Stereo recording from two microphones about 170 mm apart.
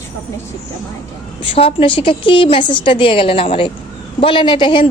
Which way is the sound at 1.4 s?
30° left (ahead or behind).